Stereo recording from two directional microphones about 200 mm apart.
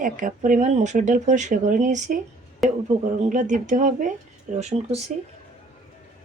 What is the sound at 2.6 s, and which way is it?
Speech, centre (ahead or behind).